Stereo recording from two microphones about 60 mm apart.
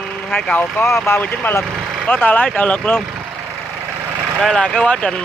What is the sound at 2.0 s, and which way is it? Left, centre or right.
Speech, left.